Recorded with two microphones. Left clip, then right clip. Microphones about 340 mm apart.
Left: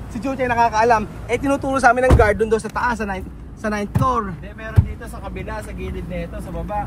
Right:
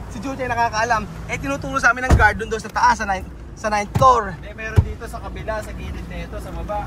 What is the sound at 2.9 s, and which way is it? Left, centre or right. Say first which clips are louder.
Speech: right 5 dB; centre.